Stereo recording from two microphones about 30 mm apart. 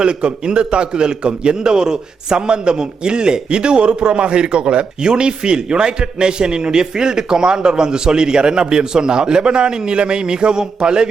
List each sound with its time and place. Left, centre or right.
0.0 s a man's voice: right